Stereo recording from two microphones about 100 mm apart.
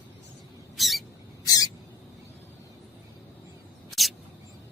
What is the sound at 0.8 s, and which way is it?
Rodents, centre (ahead or behind).